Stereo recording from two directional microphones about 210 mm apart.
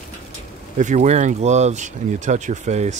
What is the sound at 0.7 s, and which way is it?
Speech, 35° right (ahead or behind).